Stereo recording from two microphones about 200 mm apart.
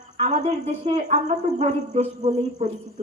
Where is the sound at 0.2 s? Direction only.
35° right (ahead or behind).